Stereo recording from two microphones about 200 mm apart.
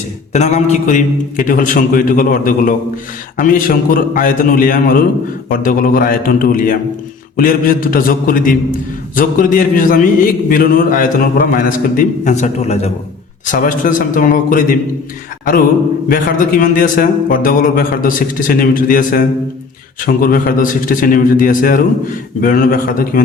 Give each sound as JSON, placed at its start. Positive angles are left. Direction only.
{"t": 0.3, "sound": "a man's voice", "side_deg": 35}
{"t": 16.0, "sound": "a man's voice", "side_deg": 45}